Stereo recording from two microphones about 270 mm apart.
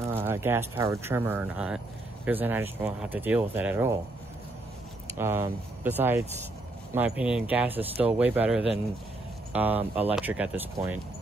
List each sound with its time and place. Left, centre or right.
0.0 s speech: centre
5.1 s speech: centre
7.7 s speech: right
8.0 s speech: centre